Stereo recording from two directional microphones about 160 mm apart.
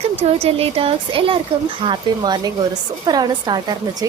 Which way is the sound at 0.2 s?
40° right (ahead or behind).